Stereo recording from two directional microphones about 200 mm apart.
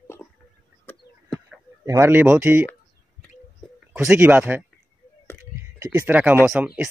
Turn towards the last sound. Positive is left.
turn(degrees=-5)  # may be behind; listen again after turning